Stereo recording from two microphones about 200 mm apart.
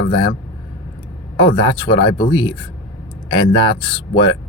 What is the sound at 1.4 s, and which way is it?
Speech, 25° left (ahead or behind).